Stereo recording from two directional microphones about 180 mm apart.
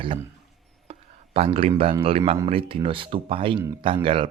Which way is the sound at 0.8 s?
30° right (ahead or behind).